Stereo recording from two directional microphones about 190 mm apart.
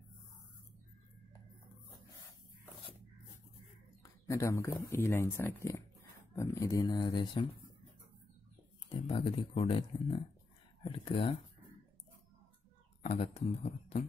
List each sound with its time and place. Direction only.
4.3 s speech: 15° left (ahead or behind)
8.8 s speech: 30° left (ahead or behind)
13.0 s speech: 35° left (ahead or behind)